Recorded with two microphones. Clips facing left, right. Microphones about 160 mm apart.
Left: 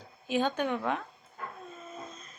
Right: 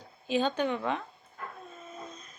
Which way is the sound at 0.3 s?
10° left (ahead or behind).